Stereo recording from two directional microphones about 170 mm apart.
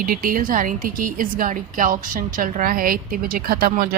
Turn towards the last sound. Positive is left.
turn(degrees=-60)  # may be behind; listen again after turning